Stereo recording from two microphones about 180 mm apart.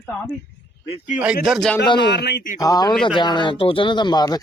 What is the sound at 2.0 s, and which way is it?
Speech, 70° left (ahead or behind).